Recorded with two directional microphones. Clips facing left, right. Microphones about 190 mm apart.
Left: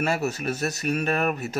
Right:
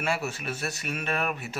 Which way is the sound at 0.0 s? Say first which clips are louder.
Left 5 dB; 40° left (ahead or behind).